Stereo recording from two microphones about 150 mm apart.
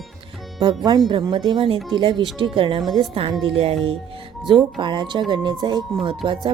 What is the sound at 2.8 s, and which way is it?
Speech, centre (ahead or behind).